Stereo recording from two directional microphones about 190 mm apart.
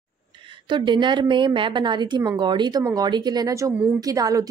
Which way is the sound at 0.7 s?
25° right (ahead or behind).